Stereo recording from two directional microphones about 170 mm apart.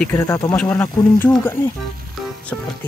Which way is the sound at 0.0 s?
15° left (ahead or behind).